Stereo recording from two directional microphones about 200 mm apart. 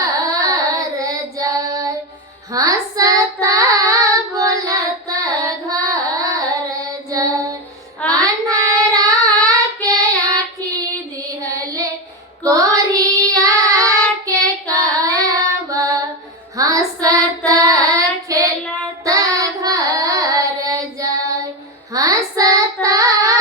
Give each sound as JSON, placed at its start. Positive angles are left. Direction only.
{"t": 0.0, "sound": "child singing", "side_deg": -15}
{"t": 7.1, "sound": "female singing", "side_deg": -15}
{"t": 8.0, "sound": "child singing", "side_deg": -15}
{"t": 11.4, "sound": "child singing", "side_deg": -15}
{"t": 16.6, "sound": "music", "side_deg": -15}
{"t": 17.5, "sound": "child singing", "side_deg": -15}